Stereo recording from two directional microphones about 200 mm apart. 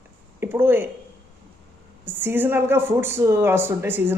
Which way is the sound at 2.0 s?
10° right (ahead or behind).